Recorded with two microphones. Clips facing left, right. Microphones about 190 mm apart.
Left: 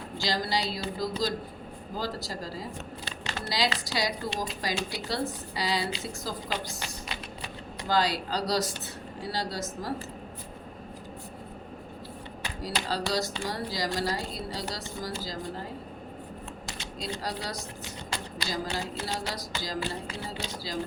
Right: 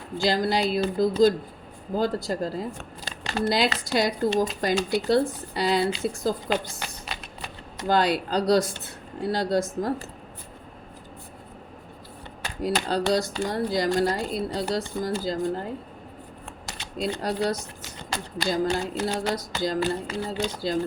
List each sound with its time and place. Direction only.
0.2 s speech: 55° right (ahead or behind)
12.6 s speech: 55° right (ahead or behind)
16.6 s a sound: 55° right (ahead or behind)
18.3 s speech: 55° right (ahead or behind)